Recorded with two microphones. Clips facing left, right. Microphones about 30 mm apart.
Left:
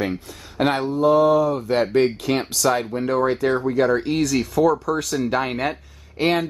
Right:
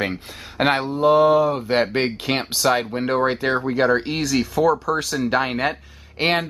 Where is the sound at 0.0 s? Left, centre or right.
Right.